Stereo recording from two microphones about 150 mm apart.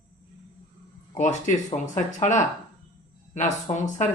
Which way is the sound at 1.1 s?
55° left (ahead or behind).